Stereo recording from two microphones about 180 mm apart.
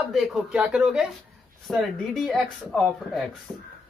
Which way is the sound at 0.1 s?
5° right (ahead or behind).